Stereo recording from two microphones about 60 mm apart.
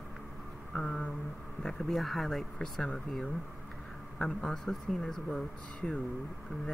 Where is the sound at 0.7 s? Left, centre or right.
Centre.